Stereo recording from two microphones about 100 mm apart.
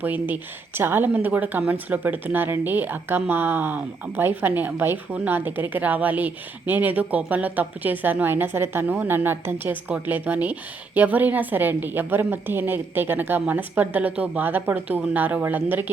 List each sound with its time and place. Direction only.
0.0 s speech: 20° right (ahead or behind)